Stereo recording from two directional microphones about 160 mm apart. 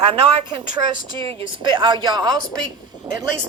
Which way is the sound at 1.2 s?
30° right (ahead or behind).